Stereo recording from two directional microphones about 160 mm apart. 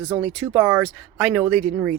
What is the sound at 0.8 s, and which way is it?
Speech, centre (ahead or behind).